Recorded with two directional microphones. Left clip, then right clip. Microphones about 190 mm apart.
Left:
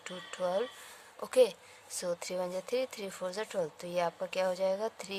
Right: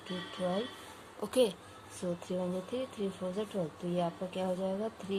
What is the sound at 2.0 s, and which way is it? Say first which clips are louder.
Speech: left 2 dB; 90° left.